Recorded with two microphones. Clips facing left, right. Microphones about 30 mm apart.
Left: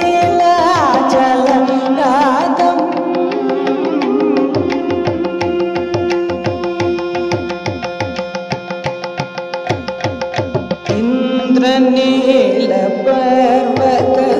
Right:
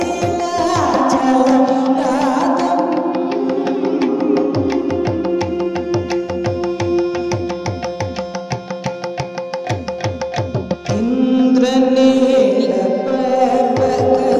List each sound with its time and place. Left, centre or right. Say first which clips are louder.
0.0 s music: left 7 dB; left
9.7 s music: left 3 dB; left